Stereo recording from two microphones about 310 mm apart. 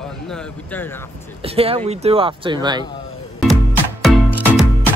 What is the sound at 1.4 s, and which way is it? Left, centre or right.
Speech, centre.